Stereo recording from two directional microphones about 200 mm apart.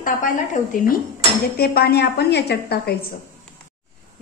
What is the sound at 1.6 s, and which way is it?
A woman's voice, 50° left (ahead or behind).